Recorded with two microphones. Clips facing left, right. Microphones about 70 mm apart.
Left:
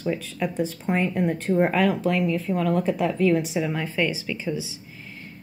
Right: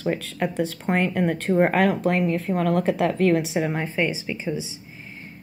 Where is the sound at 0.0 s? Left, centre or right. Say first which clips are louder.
Right 2 dB; right.